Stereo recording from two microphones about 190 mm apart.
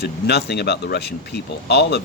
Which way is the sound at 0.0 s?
60° left (ahead or behind).